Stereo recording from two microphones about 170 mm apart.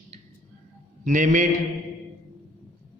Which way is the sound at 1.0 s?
50° right (ahead or behind).